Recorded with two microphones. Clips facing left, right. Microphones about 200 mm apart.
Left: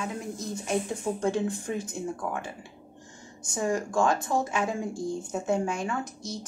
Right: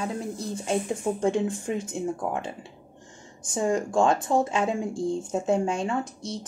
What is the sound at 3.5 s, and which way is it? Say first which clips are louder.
Speech: right 3 dB; 25° right (ahead or behind).